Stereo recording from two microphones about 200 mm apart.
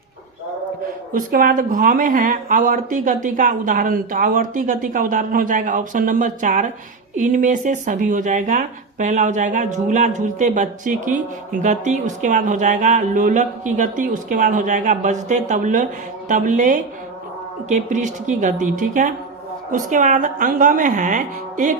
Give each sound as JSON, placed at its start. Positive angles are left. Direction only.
{"t": 1.1, "sound": "speech", "side_deg": -45}